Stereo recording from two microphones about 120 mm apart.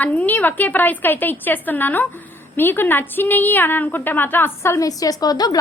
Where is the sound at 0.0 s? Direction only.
15° left (ahead or behind).